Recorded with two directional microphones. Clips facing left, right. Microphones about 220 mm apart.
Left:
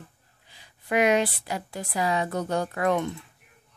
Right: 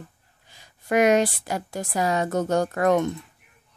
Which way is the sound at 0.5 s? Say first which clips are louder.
Right 4 dB; 45° right (ahead or behind).